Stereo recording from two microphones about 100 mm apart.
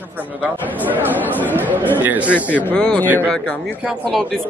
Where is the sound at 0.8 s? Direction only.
15° right (ahead or behind).